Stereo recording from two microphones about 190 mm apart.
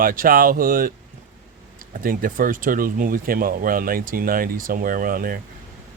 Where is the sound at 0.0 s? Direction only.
50° right (ahead or behind).